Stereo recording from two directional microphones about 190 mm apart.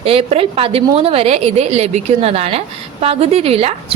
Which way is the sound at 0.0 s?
30° right (ahead or behind).